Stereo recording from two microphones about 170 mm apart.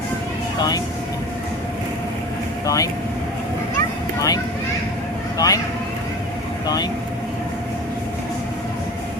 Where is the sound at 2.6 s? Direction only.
20° left (ahead or behind).